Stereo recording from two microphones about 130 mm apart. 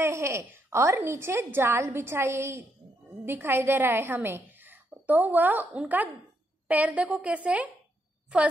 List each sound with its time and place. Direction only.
0.0 s a woman's voice: 20° right (ahead or behind)